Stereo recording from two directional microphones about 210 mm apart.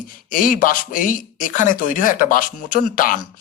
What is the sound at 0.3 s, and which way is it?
Speech, 40° left (ahead or behind).